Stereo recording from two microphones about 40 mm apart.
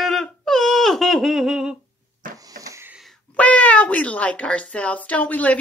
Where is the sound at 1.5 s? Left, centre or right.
Right.